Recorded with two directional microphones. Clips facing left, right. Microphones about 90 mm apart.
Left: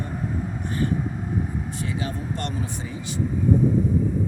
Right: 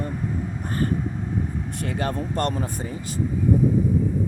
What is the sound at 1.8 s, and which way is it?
Speech, 55° right (ahead or behind).